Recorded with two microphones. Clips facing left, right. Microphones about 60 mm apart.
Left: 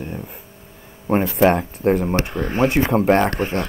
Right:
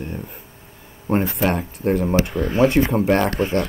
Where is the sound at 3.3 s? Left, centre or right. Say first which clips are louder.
Right 1 dB; left.